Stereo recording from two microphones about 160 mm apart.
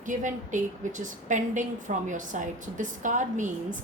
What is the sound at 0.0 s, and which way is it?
A woman's voice, 50° right (ahead or behind).